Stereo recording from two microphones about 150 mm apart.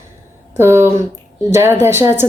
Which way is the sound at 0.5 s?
15° right (ahead or behind).